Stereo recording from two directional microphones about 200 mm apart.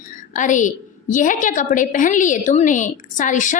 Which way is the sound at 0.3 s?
40° left (ahead or behind).